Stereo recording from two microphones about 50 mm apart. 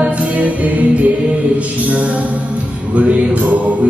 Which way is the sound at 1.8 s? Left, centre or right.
Right.